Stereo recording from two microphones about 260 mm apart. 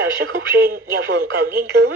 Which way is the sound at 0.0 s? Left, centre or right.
Right.